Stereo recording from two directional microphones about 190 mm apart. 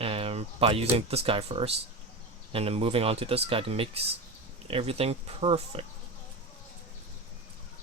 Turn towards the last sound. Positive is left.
turn(degrees=-30)  # may be behind; listen again after turning